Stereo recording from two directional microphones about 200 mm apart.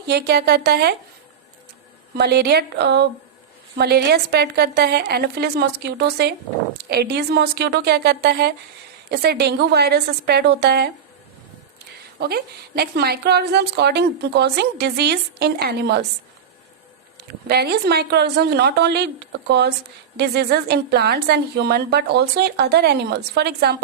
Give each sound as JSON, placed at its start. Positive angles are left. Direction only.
{"t": 0.0, "sound": "a woman's voice", "side_deg": -55}
{"t": 2.1, "sound": "a woman's voice", "side_deg": -55}
{"t": 12.2, "sound": "a woman's voice", "side_deg": -50}
{"t": 17.2, "sound": "a woman's voice", "side_deg": -55}